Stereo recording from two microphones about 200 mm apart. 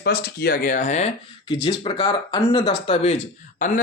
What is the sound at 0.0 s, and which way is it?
Speech, 50° left (ahead or behind).